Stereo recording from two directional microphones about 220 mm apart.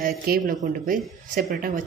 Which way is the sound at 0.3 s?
45° right (ahead or behind).